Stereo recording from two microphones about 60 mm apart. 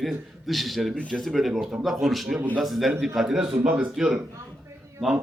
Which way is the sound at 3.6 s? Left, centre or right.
Right.